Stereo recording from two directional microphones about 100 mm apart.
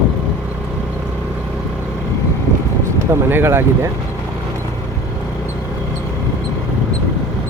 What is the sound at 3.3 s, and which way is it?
Speech, 25° right (ahead or behind).